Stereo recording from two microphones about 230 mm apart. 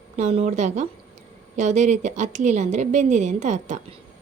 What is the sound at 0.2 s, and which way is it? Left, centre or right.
A woman's voice, right.